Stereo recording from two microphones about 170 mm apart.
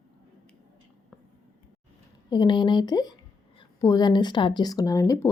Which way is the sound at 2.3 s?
25° left (ahead or behind).